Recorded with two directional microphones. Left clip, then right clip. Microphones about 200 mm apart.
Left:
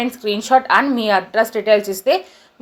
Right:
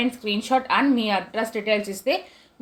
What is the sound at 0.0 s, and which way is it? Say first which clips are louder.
A woman's voice: left 5 dB; 20° left (ahead or behind).